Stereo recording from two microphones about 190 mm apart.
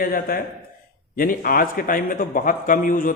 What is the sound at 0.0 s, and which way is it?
A man's voice, 50° left (ahead or behind).